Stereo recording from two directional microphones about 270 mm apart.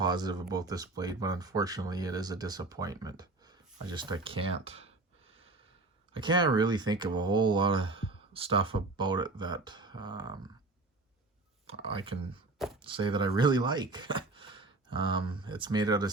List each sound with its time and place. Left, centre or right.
0.0 s speech: centre
6.1 s speech: centre
11.6 s speech: right
12.5 s a sound: centre
12.8 s speech: centre